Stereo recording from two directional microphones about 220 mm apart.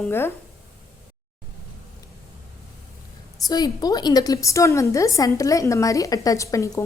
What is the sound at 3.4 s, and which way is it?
A woman's voice, 20° left (ahead or behind).